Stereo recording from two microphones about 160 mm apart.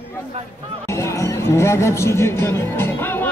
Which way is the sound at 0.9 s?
15° left (ahead or behind).